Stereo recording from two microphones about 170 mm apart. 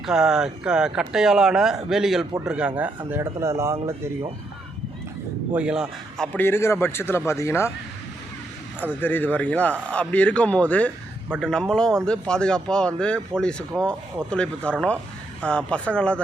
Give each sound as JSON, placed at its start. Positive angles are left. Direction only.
{"t": 0.0, "sound": "speech", "side_deg": -5}
{"t": 5.5, "sound": "a man's voice", "side_deg": -5}
{"t": 8.8, "sound": "a man's voice", "side_deg": 10}